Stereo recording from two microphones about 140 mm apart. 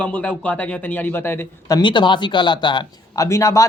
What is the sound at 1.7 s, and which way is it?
Speech, 35° left (ahead or behind).